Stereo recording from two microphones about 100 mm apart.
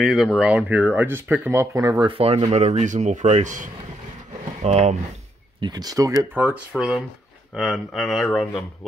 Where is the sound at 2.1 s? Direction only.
70° right (ahead or behind); by 2.6 s 85° right.